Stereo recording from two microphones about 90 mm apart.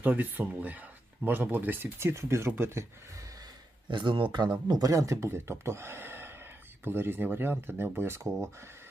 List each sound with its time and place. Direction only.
0.0 s speech: 20° right (ahead or behind)
3.8 s speech: 65° right (ahead or behind)
4.7 s speech: 40° right (ahead or behind)